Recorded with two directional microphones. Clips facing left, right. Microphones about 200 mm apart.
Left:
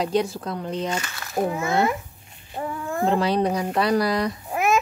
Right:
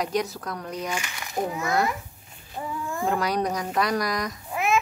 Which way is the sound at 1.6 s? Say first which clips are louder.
Left 1 dB; 25° left (ahead or behind).